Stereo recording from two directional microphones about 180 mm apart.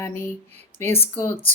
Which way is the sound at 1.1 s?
10° left (ahead or behind).